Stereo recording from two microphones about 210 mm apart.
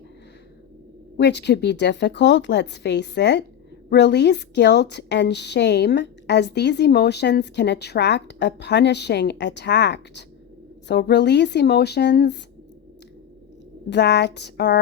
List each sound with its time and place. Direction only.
1.1 s a woman's voice: 55° left (ahead or behind)
13.9 s speech: 55° left (ahead or behind)